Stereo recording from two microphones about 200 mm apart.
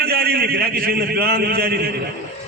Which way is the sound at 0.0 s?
50° right (ahead or behind).